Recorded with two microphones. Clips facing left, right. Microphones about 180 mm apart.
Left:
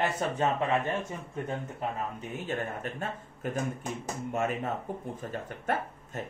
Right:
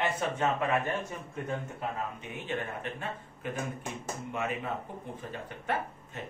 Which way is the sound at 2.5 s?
45° left (ahead or behind).